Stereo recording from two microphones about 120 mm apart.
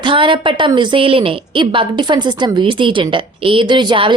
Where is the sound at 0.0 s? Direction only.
45° right (ahead or behind).